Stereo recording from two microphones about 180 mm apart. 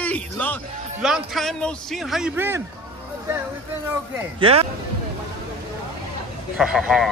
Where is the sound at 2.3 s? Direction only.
15° right (ahead or behind).